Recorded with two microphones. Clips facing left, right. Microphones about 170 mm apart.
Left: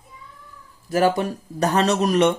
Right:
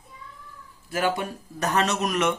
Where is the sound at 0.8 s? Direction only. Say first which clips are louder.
Left 7 dB; 40° left (ahead or behind).